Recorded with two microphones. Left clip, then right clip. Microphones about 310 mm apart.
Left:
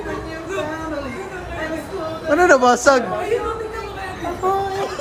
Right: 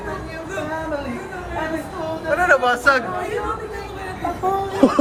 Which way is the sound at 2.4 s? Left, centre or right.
Centre.